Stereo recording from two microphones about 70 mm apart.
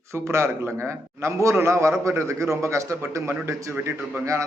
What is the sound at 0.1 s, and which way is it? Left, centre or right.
A man's voice, right.